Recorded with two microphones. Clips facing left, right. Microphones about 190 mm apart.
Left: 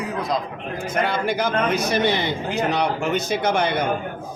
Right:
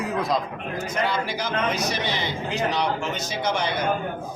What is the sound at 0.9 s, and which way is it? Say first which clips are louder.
Speech: left 4 dB; 55° left (ahead or behind).